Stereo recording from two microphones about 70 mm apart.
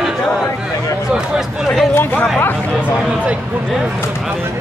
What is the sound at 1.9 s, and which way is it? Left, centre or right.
Speech, left.